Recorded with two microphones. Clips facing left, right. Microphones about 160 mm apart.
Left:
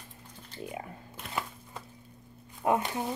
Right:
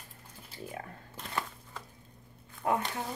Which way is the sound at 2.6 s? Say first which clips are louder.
Left 3 dB; 20° left (ahead or behind).